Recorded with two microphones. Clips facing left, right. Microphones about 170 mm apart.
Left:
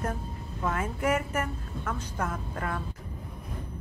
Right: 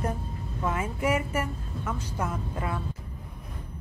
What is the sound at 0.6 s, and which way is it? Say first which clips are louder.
A woman's voice: even; 10° right (ahead or behind).